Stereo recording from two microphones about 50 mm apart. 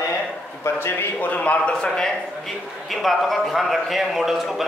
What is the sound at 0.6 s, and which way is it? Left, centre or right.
Speech, left.